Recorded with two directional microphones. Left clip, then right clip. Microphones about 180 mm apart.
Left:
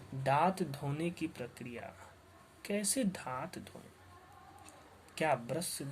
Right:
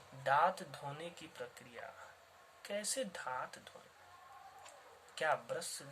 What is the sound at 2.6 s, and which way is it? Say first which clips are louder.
Speech: left 4 dB; 30° left (ahead or behind).